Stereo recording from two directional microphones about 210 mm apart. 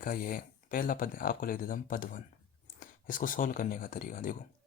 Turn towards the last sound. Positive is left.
turn(degrees=40)  # may be behind; listen again after turning